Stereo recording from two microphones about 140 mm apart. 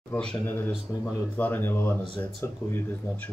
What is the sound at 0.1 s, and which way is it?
Speech, 10° left (ahead or behind).